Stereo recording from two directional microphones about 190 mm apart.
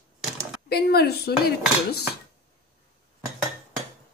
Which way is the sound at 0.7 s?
55° left (ahead or behind).